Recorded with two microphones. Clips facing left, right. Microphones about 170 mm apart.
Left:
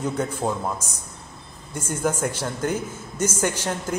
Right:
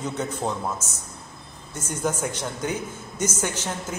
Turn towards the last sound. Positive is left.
turn(degrees=10)  # may be behind; listen again after turning